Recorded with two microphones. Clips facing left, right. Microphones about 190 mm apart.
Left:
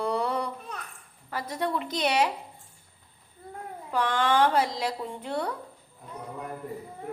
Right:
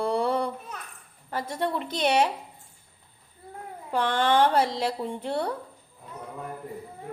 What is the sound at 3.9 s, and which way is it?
A woman's voice, 30° right (ahead or behind).